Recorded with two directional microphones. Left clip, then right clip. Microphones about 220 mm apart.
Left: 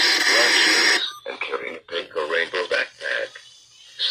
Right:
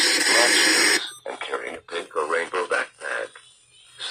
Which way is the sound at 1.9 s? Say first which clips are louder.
Even; 15° right (ahead or behind).